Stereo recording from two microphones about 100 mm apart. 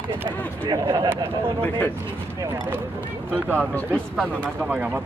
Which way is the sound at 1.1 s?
25° right (ahead or behind).